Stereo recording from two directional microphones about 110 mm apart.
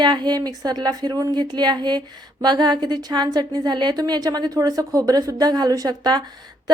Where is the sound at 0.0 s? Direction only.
45° right (ahead or behind).